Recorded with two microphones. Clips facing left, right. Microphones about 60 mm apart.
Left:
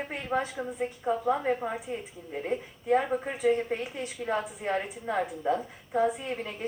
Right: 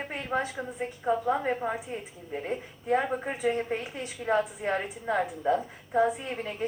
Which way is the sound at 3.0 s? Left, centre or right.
Right.